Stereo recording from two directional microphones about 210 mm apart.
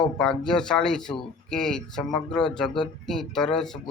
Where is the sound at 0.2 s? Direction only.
5° left (ahead or behind).